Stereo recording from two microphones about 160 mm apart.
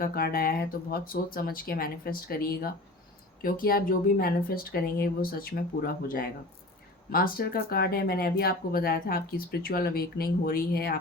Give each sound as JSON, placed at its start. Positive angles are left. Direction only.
{"t": 0.0, "sound": "speech", "side_deg": 70}